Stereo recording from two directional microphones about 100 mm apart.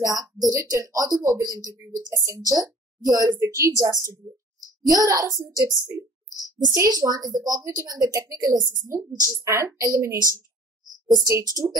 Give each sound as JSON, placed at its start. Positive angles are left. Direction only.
{"t": 0.0, "sound": "a woman's voice", "side_deg": -35}
{"t": 11.2, "sound": "a woman's voice", "side_deg": -35}